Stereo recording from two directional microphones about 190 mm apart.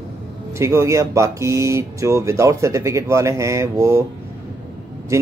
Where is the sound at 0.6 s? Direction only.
15° right (ahead or behind).